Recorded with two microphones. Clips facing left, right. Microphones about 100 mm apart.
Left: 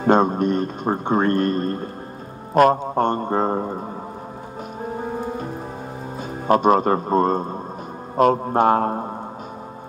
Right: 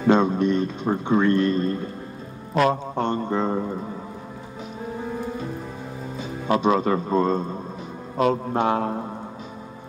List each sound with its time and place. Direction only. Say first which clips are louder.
0.0 s speech: left 2 dB; 45° left (ahead or behind)
4.8 s music: left 3 dB; 40° left (ahead or behind)
6.1 s a man's voice: left 5 dB; 50° left (ahead or behind)